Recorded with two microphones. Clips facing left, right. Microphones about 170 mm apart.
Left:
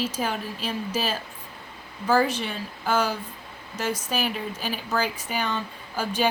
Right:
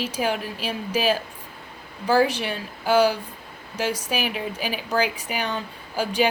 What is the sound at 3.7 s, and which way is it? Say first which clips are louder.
A woman's voice: right 2 dB; 15° right (ahead or behind).